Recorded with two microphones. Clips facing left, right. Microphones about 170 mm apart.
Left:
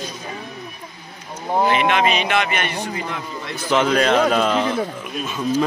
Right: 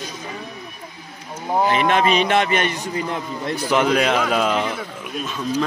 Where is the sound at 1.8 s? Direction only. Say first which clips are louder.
Right 1 dB; 40° right (ahead or behind).